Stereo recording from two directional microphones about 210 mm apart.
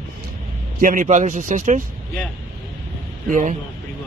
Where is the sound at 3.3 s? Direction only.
40° right (ahead or behind).